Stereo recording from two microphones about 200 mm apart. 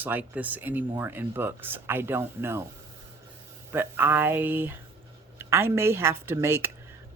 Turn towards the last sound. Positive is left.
turn(degrees=-10)  # may be behind; listen again after turning